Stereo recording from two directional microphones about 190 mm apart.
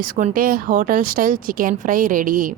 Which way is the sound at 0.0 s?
45° right (ahead or behind).